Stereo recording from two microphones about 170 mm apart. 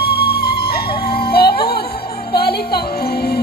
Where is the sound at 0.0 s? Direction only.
65° left (ahead or behind).